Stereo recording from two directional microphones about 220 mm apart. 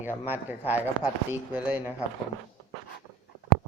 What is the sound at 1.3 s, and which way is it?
Speech, 5° right (ahead or behind).